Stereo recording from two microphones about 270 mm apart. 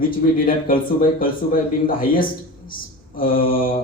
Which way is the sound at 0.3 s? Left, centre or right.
Left.